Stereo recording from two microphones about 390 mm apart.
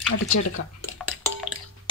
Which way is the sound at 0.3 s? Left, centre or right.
Left.